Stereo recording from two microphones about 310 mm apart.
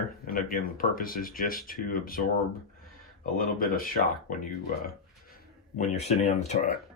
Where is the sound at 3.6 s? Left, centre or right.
Left.